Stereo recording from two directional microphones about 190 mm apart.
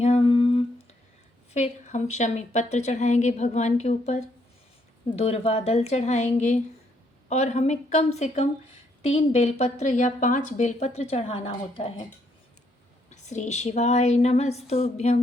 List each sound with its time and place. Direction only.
0.0 s humming: 30° left (ahead or behind)
1.5 s speech: 35° left (ahead or behind)
13.1 s speech: 40° left (ahead or behind)